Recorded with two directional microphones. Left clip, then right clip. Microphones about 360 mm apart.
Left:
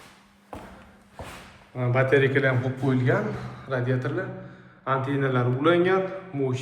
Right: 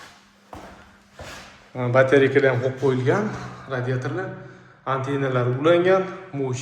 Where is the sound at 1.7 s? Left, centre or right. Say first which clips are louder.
Right 5 dB; centre.